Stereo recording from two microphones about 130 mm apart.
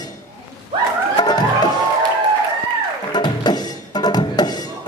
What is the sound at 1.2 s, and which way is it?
Music, 30° left (ahead or behind).